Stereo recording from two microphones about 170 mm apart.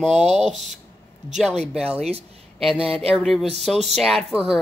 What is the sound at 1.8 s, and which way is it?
Speech, 35° right (ahead or behind).